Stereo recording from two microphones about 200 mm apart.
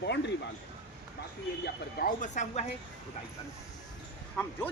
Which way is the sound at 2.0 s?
40° left (ahead or behind).